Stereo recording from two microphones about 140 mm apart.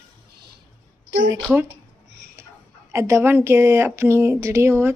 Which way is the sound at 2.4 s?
20° right (ahead or behind).